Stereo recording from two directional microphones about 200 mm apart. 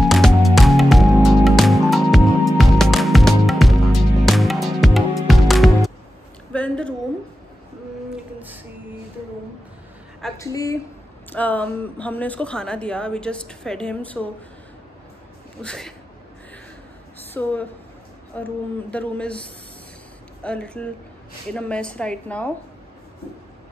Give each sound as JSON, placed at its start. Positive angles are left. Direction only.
{"t": 0.0, "sound": "music", "side_deg": 0}
{"t": 6.5, "sound": "a sound", "side_deg": 5}
{"t": 10.4, "sound": "a woman's voice", "side_deg": 15}
{"t": 15.6, "sound": "a woman's voice", "side_deg": 5}
{"t": 17.3, "sound": "speech", "side_deg": 10}
{"t": 20.4, "sound": "a woman's voice", "side_deg": 5}